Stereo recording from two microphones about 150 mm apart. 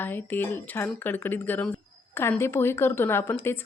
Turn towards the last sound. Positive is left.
turn(degrees=15)  # may be behind; listen again after turning